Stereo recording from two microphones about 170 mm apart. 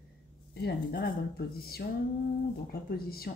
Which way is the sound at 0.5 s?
65° left (ahead or behind).